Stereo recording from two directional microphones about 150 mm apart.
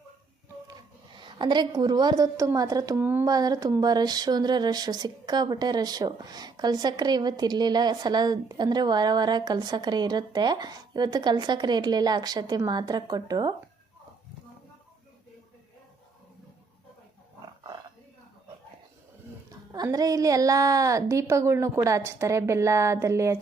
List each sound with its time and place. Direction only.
1.2 s speech: 30° right (ahead or behind); by 3.2 s 15° right (ahead or behind)
3.2 s speech: 25° right (ahead or behind)
19.5 s speech: 25° right (ahead or behind)